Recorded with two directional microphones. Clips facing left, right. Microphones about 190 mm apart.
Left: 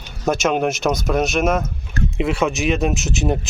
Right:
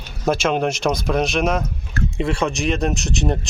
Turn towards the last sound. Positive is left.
turn(degrees=5)  # may be behind; listen again after turning